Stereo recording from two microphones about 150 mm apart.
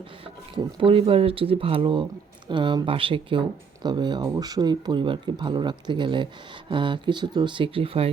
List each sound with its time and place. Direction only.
0.5 s speech: 35° right (ahead or behind)